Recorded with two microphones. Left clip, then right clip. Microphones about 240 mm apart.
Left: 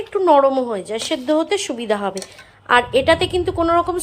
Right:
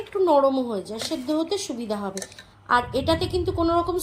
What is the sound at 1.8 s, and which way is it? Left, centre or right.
A woman's voice, left.